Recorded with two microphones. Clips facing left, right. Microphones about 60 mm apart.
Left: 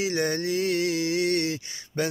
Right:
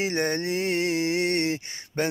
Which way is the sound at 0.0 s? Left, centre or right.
Right.